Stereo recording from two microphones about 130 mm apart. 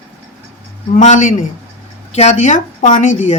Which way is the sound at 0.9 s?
70° left (ahead or behind).